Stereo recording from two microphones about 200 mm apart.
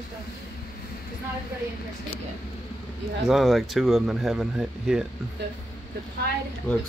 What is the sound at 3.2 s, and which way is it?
Speech, centre (ahead or behind).